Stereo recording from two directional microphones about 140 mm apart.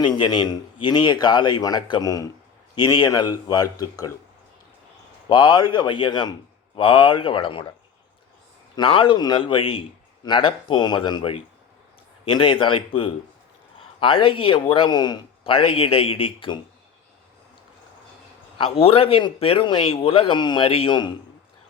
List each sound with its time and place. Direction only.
0.0 s speech: 35° left (ahead or behind)
5.3 s speech: 30° left (ahead or behind)
8.7 s speech: 40° left (ahead or behind)
15.5 s speech: 40° left (ahead or behind)
18.5 s speech: 40° left (ahead or behind)